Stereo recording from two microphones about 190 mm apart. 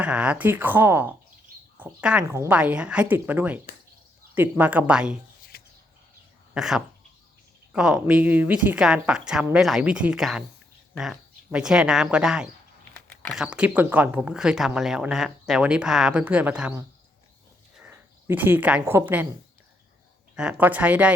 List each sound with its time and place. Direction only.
0.0 s a woman's voice: 5° right (ahead or behind)
5.5 s a sound: 50° left (ahead or behind)
6.5 s speech: 5° right (ahead or behind)
20.3 s a woman's voice: 5° right (ahead or behind)